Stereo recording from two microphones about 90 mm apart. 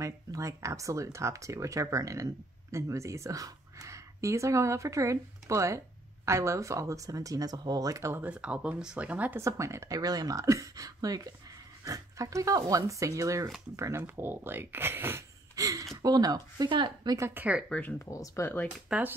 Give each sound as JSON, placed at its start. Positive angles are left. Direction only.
{"t": 0.0, "sound": "speech", "side_deg": -40}
{"t": 8.2, "sound": "speech", "side_deg": -15}
{"t": 9.4, "sound": "speech", "side_deg": -35}
{"t": 9.9, "sound": "speech", "side_deg": -45}
{"t": 15.5, "sound": "a woman's voice", "side_deg": -40}
{"t": 17.6, "sound": "speech", "side_deg": 15}
{"t": 17.9, "sound": "speech", "side_deg": 35}
{"t": 18.9, "sound": "speech", "side_deg": -10}